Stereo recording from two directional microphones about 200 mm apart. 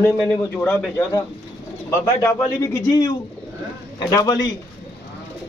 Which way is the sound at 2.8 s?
20° left (ahead or behind).